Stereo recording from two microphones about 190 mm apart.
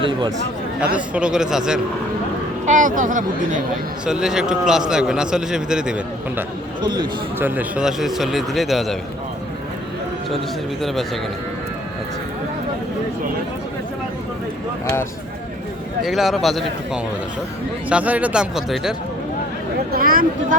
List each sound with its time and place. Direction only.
0.0 s speech: 25° right (ahead or behind)
0.9 s a man's voice: 5° right (ahead or behind)
2.6 s speech: 45° right (ahead or behind)
4.0 s a man's voice: 5° right (ahead or behind)
6.8 s speech: 20° right (ahead or behind)
7.3 s a man's voice: 10° right (ahead or behind)
16.0 s a man's voice: centre (ahead or behind)
19.9 s speech: 50° right (ahead or behind)